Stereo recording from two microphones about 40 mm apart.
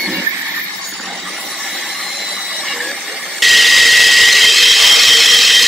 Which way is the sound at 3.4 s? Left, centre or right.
Centre.